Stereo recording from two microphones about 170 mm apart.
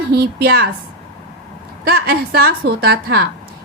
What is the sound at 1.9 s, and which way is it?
A woman's voice, 65° right (ahead or behind).